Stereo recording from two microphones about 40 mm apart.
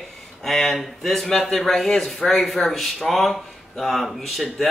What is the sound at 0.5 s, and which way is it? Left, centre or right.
Speech, centre.